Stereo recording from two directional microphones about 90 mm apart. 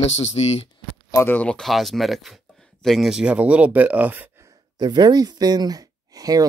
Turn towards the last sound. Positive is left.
turn(degrees=-45)  # may be behind; listen again after turning